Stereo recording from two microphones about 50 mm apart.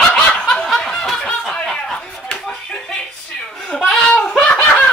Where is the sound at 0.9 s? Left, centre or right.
Centre.